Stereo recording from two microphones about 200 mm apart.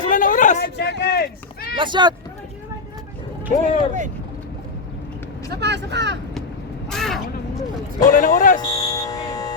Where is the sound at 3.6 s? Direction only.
40° right (ahead or behind).